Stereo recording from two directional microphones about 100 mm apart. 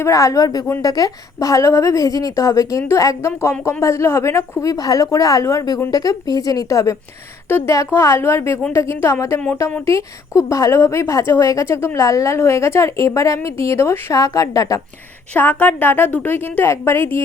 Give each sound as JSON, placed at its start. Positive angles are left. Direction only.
{"t": 0.0, "sound": "a woman's voice", "side_deg": 30}
{"t": 4.6, "sound": "a woman's voice", "side_deg": 40}
{"t": 15.3, "sound": "speech", "side_deg": 15}